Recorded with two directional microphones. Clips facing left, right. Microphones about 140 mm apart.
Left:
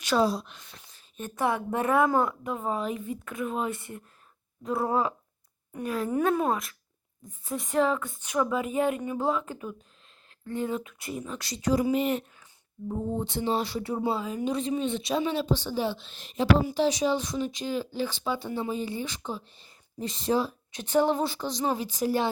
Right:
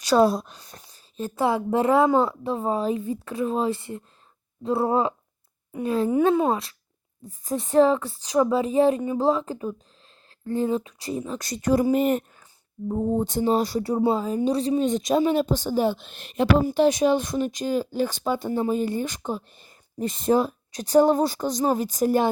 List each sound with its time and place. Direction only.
0.2 s a woman's voice: 50° right (ahead or behind); by 11.3 s 30° right (ahead or behind)
11.3 s speech: 50° right (ahead or behind)